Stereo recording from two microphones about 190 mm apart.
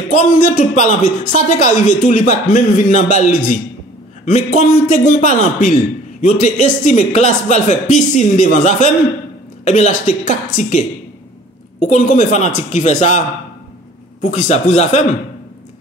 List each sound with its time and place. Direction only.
0.1 s speech: 45° left (ahead or behind)
4.6 s speech: 40° left (ahead or behind)
14.2 s speech: 40° left (ahead or behind)